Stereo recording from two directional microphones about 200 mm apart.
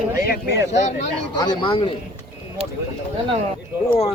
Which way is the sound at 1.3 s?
20° left (ahead or behind).